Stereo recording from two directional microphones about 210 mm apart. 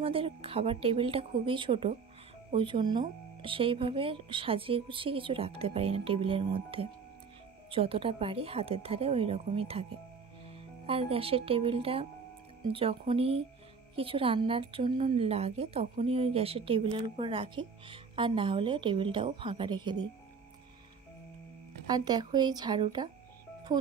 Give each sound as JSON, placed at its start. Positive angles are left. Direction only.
{"t": 0.0, "sound": "a woman's voice", "side_deg": -25}
{"t": 10.9, "sound": "a woman's voice", "side_deg": -25}
{"t": 21.8, "sound": "a woman's voice", "side_deg": -20}